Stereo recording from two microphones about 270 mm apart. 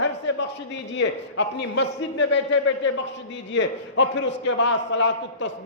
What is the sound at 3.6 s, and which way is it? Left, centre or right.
A man's voice, left.